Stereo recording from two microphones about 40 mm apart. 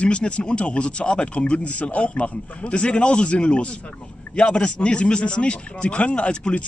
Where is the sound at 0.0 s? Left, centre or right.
Left.